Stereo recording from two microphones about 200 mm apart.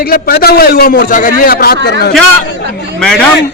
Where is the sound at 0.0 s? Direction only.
50° left (ahead or behind).